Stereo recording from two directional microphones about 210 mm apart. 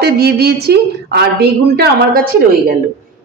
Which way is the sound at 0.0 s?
50° right (ahead or behind).